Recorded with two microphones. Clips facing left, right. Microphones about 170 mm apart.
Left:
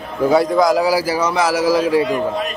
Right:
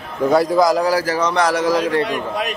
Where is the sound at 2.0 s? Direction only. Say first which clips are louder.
Left 3 dB; 80° right.